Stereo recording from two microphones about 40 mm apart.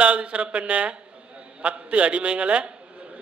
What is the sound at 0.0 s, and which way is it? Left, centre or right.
A man's voice, right.